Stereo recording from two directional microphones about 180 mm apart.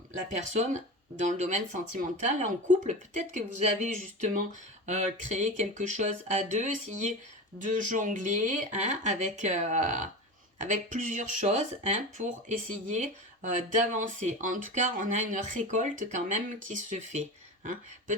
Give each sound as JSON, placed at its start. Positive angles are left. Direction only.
{"t": 0.3, "sound": "speech", "side_deg": -40}